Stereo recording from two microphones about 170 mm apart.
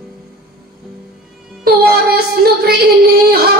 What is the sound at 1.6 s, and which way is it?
Music, 65° right (ahead or behind).